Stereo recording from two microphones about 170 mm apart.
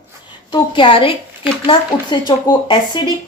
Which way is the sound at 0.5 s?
30° left (ahead or behind).